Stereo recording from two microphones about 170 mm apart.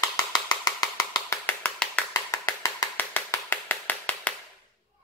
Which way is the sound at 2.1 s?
20° left (ahead or behind).